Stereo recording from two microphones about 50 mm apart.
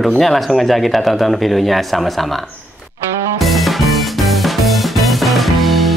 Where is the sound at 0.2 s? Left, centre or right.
Centre.